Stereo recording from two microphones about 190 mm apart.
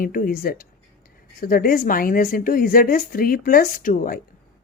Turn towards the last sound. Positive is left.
turn(degrees=50)  # may be behind; listen again after turning